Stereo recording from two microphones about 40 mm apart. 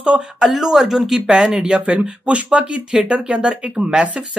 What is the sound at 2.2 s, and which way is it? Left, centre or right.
Speech, right.